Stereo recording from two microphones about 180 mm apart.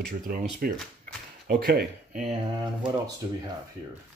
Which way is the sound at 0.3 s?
50° right (ahead or behind).